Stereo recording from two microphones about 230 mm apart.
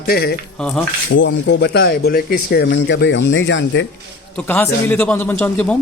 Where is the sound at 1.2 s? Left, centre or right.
Left.